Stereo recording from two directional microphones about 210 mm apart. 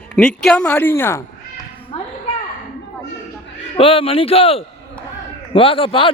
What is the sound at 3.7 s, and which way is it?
A man's voice, 25° left (ahead or behind).